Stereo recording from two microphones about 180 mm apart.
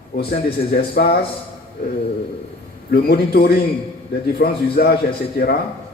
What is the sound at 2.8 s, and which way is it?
A man's voice, 55° left (ahead or behind).